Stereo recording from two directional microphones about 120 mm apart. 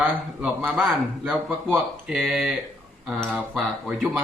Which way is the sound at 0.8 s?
Centre (ahead or behind).